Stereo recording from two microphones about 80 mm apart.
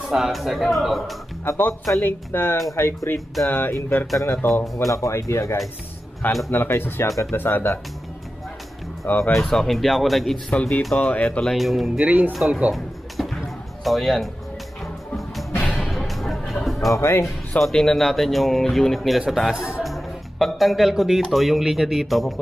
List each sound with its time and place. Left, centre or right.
0.0 s speech: centre
1.4 s speech: left
7.1 s speech: left
7.3 s speech: left
9.0 s speech: left
9.4 s speech: centre
10.5 s speech: centre
11.4 s speech: centre
12.0 s speech: centre
12.7 s music: centre
13.8 s speech: centre
15.6 s music: centre
16.9 s speech: left
17.6 s speech: centre